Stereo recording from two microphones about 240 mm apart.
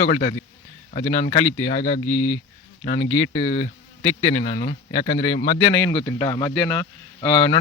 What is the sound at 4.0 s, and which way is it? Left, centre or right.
Speech, left.